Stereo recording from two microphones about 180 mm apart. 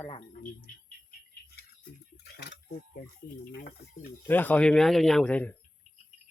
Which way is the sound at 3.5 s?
60° left (ahead or behind).